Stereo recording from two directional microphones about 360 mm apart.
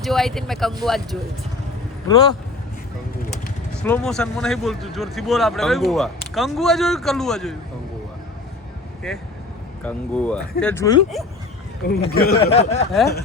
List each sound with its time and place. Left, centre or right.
0.0 s speech: centre
3.8 s speech: centre
9.1 s speech: centre
11.9 s speech: left